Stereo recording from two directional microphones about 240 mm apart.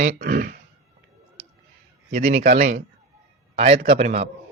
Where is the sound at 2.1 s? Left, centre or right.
Right.